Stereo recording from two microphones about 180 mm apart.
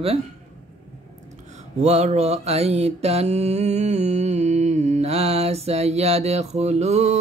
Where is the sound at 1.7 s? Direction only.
40° right (ahead or behind).